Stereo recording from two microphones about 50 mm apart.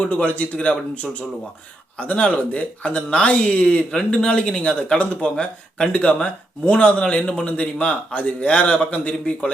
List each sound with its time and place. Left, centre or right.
0.0 s speech: left
2.0 s speech: left